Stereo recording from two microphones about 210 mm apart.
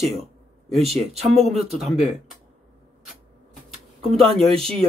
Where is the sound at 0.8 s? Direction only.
30° right (ahead or behind).